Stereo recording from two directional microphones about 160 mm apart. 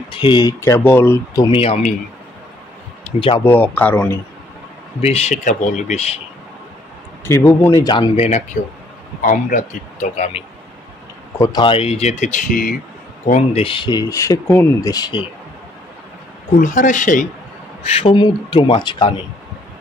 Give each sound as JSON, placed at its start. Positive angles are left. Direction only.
{"t": 0.1, "sound": "speech", "side_deg": 30}
{"t": 0.7, "sound": "speech", "side_deg": 10}
{"t": 1.5, "sound": "speech", "side_deg": 35}
{"t": 3.2, "sound": "speech", "side_deg": 35}
{"t": 3.4, "sound": "speech", "side_deg": 10}
{"t": 5.0, "sound": "speech", "side_deg": 40}
{"t": 7.2, "sound": "speech", "side_deg": 15}
{"t": 8.2, "sound": "speech", "side_deg": 45}
{"t": 10.1, "sound": "speech", "side_deg": 40}
{"t": 11.3, "sound": "speech", "side_deg": 25}
{"t": 13.3, "sound": "speech", "side_deg": 35}
{"t": 16.5, "sound": "speech", "side_deg": 55}
{"t": 17.8, "sound": "speech", "side_deg": 40}